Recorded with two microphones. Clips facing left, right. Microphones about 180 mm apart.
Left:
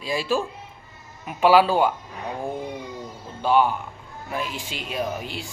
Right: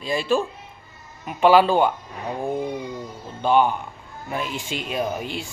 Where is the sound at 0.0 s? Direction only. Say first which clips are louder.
Right 2 dB; 5° left (ahead or behind).